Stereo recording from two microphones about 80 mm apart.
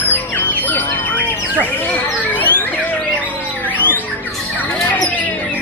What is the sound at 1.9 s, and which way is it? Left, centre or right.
Bird, left.